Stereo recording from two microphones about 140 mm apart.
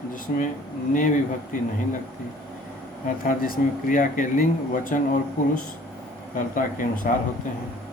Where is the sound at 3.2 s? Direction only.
85° left.